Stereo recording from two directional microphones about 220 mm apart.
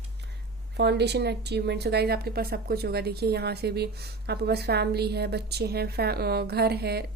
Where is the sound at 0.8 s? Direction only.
50° right (ahead or behind).